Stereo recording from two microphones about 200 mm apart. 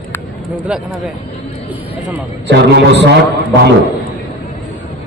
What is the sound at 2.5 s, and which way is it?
Speech, 60° right (ahead or behind).